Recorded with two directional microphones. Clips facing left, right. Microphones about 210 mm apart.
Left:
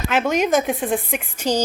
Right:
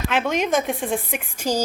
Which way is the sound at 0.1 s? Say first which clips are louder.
Left 4 dB; centre (ahead or behind).